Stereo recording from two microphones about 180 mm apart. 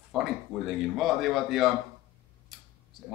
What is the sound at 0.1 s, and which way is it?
Speech, centre (ahead or behind).